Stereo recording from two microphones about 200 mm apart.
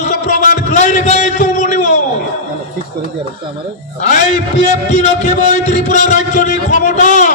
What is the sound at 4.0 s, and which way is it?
A man's voice, 35° left (ahead or behind).